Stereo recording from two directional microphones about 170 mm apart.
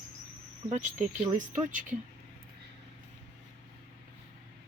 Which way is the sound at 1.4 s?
50° right (ahead or behind).